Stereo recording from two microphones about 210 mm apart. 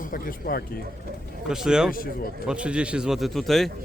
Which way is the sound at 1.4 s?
5° right (ahead or behind).